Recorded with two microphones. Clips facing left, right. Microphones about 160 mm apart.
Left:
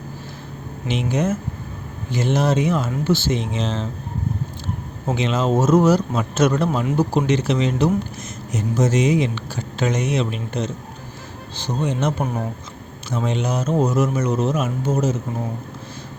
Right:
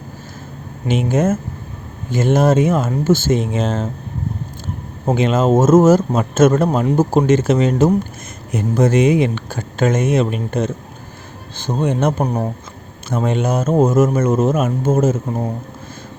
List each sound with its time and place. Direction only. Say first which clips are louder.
0.9 s a man's voice: right 5 dB; 50° right (ahead or behind)
5.1 s a man's voice: right 5 dB; 50° right (ahead or behind)
8.5 s a man's voice: right 5 dB; 55° right (ahead or behind); by 12.5 s 40° right (ahead or behind)
13.1 s a man's voice: right 5 dB; 50° right (ahead or behind)